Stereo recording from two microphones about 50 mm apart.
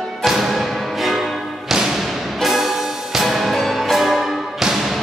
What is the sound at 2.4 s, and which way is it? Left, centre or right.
Music, centre.